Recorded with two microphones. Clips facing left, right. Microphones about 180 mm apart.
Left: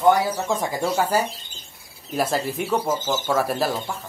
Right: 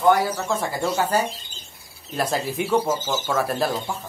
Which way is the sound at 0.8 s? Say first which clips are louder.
Even; 10° left (ahead or behind).